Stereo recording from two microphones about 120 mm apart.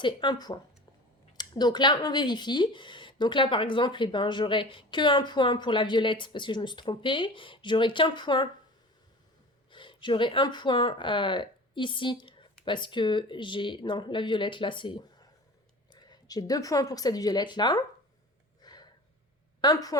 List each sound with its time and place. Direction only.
0.0 s speech: 40° left (ahead or behind)
9.7 s speech: 40° left (ahead or behind)
18.6 s gasp: 35° left (ahead or behind)
19.6 s a woman's voice: 30° left (ahead or behind)